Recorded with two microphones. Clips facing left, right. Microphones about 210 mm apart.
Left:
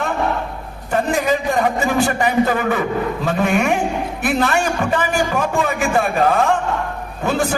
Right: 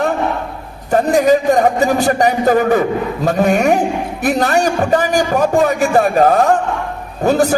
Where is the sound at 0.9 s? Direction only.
40° right (ahead or behind).